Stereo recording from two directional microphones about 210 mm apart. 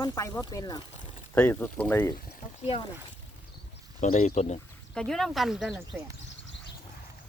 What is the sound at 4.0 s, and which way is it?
Speech, 35° left (ahead or behind).